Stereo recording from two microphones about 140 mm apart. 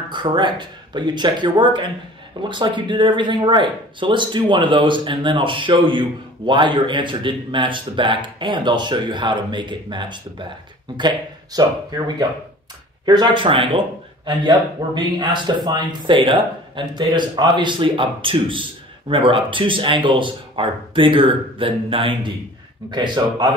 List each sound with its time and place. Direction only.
0.1 s speech: 35° right (ahead or behind)
13.0 s speech: 30° right (ahead or behind)